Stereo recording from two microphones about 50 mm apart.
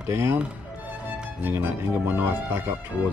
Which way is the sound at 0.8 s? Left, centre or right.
Right.